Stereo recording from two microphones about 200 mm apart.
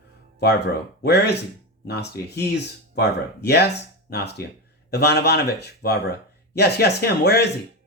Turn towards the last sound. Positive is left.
turn(degrees=55)  # may be behind; listen again after turning